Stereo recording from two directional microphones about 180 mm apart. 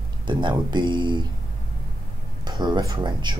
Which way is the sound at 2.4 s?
25° right (ahead or behind).